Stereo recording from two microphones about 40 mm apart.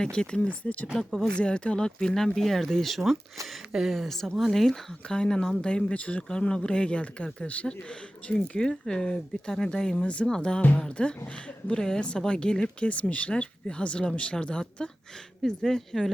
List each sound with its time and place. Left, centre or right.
0.0 s speech: left
0.9 s speech: centre
1.4 s speech: left; by 3.6 s centre
3.7 s speech: centre
3.9 s speech: centre
5.0 s speech: left
6.0 s speech: left
6.4 s speech: left
12.9 s speech: left
15.4 s speech: centre